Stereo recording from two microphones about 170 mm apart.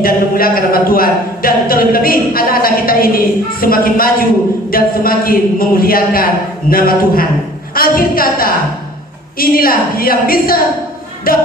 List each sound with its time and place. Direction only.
0.0 s speech: 60° left (ahead or behind)